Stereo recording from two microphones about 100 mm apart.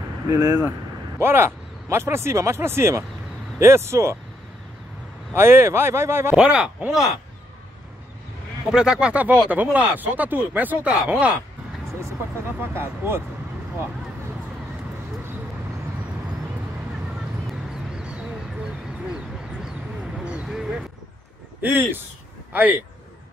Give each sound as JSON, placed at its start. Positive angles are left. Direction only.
{"t": 0.3, "sound": "speech", "side_deg": -40}
{"t": 1.2, "sound": "speech", "side_deg": -25}
{"t": 5.3, "sound": "speech", "side_deg": -25}
{"t": 6.3, "sound": "speech", "side_deg": -10}
{"t": 8.7, "sound": "speech", "side_deg": -5}
{"t": 12.5, "sound": "speech", "side_deg": -20}
{"t": 17.5, "sound": "a sound", "side_deg": -5}
{"t": 20.2, "sound": "a sound", "side_deg": -10}
{"t": 21.5, "sound": "speech", "side_deg": -20}